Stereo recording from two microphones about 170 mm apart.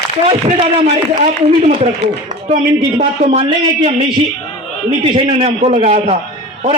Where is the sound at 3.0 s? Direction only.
35° right (ahead or behind).